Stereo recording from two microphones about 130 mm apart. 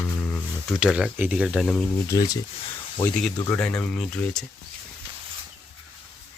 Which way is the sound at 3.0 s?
10° left (ahead or behind).